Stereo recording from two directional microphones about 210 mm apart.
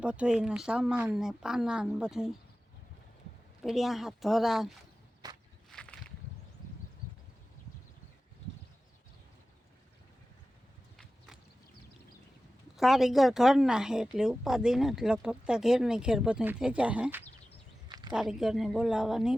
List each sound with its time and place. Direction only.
0.0 s speech: 5° right (ahead or behind)
3.6 s speech: centre (ahead or behind)
5.2 s walk: 20° right (ahead or behind)
5.7 s a sound: 5° left (ahead or behind)
12.7 s speech: centre (ahead or behind)
17.8 s a sound: 20° right (ahead or behind)
18.1 s speech: 5° right (ahead or behind)